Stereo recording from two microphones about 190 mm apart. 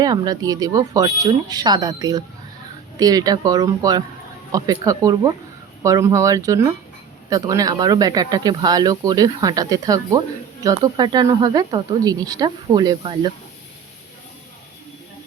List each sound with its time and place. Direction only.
0.0 s speech: 20° right (ahead or behind)